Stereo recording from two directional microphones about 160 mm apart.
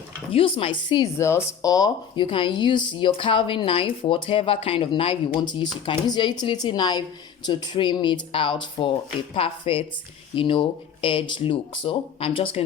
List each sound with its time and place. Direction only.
0.3 s speech: 35° left (ahead or behind)
1.2 s speech: 15° left (ahead or behind); by 12.6 s 35° left (ahead or behind)